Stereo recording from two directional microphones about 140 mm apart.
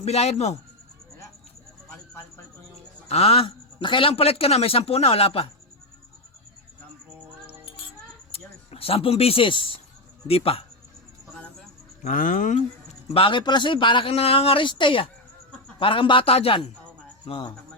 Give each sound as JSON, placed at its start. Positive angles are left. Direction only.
{"t": 0.0, "sound": "a man's voice", "side_deg": 50}
{"t": 3.1, "sound": "a man's voice", "side_deg": 45}
{"t": 8.3, "sound": "a man's voice", "side_deg": 45}
{"t": 12.0, "sound": "speech", "side_deg": 75}
{"t": 13.1, "sound": "speech", "side_deg": 35}